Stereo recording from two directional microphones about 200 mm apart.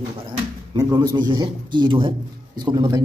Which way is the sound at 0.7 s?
20° right (ahead or behind).